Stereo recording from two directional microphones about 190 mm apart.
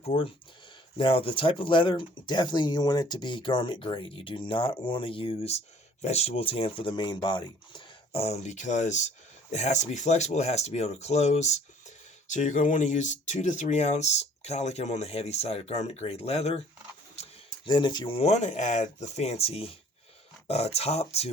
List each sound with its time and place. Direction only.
0.0 s speech: 30° left (ahead or behind)
17.7 s speech: 25° left (ahead or behind)